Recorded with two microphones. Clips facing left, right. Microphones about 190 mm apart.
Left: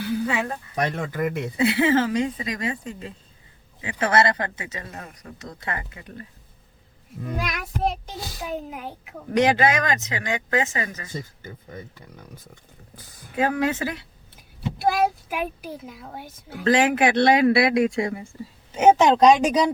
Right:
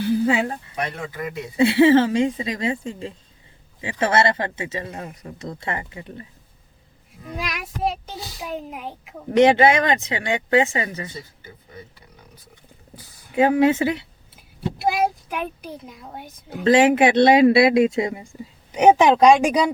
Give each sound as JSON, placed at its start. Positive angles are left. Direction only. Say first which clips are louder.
{"t": 0.0, "sound": "a sound", "louder": "right 5 dB", "side_deg": -30}
{"t": 0.8, "sound": "speech", "louder": "left 5 dB", "side_deg": 45}
{"t": 1.5, "sound": "speech", "louder": "right 6 dB", "side_deg": -30}
{"t": 7.3, "sound": "a woman's voice", "louder": "right 1 dB", "side_deg": 0}
{"t": 9.3, "sound": "speech", "louder": "right 5 dB", "side_deg": -25}
{"t": 11.4, "sound": "speech", "louder": "left 3 dB", "side_deg": 45}
{"t": 13.3, "sound": "speech", "louder": "right 6 dB", "side_deg": -25}
{"t": 14.8, "sound": "a woman's voice", "louder": "even", "side_deg": 0}
{"t": 16.6, "sound": "speech", "louder": "right 4 dB", "side_deg": -25}